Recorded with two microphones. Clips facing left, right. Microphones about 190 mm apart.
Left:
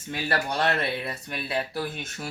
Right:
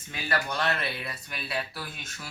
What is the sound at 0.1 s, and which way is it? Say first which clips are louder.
Speech: left 3 dB; 35° left (ahead or behind).